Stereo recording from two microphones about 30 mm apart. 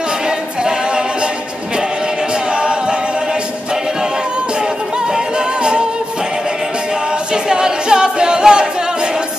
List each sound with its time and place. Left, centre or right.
5.1 s music: right
7.5 s a capella: right